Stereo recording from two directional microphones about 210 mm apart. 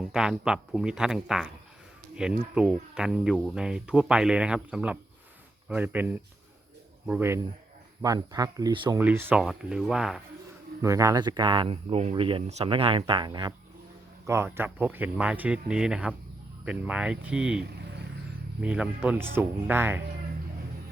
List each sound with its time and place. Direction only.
0.1 s speech: 5° right (ahead or behind); by 9.0 s 20° right (ahead or behind)
9.0 s speech: 10° right (ahead or behind)
10.8 s speech: 15° right (ahead or behind)